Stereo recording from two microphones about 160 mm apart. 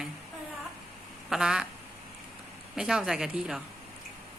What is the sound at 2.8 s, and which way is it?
Speech, 5° right (ahead or behind).